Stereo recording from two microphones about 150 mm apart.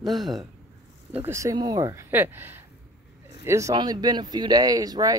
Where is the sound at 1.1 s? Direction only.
15° right (ahead or behind).